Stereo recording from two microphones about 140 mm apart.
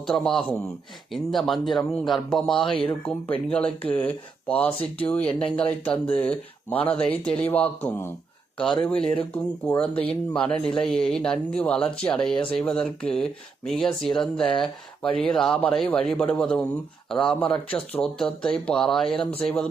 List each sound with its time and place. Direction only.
0.0 s speech: centre (ahead or behind)
2.6 s speech: 35° left (ahead or behind)
3.5 s speech: 10° left (ahead or behind)